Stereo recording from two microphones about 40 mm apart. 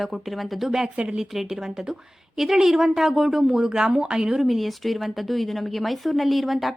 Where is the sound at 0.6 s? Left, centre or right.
Centre.